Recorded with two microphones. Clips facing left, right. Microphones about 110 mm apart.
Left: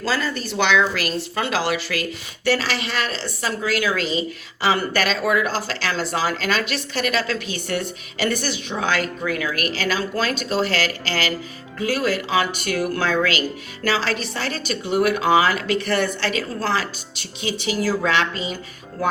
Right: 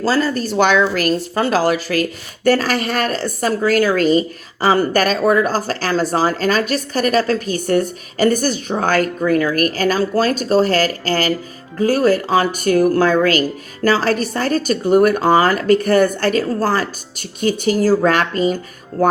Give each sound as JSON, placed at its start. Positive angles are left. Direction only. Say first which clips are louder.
{"t": 0.0, "sound": "speech", "louder": "right 7 dB", "side_deg": -40}